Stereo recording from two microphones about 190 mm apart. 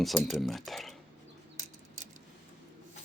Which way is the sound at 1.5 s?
35° right (ahead or behind).